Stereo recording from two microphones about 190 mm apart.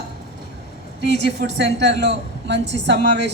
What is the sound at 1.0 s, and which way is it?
A woman's voice, 65° right (ahead or behind).